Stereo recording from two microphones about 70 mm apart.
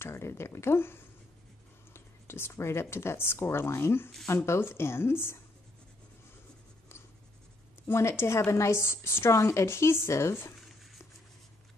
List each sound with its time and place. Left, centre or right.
0.0 s a woman's voice: left
7.8 s a woman's voice: left